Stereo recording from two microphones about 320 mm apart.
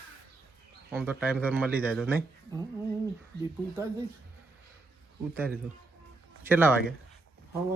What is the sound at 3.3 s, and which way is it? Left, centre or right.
Speech, right.